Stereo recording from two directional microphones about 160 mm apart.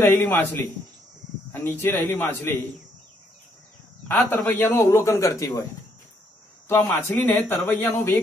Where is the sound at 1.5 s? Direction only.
10° left (ahead or behind).